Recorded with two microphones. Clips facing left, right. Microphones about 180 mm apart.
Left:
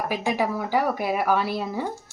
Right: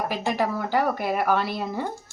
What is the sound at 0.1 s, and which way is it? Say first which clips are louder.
Speech: left 1 dB; 10° left (ahead or behind).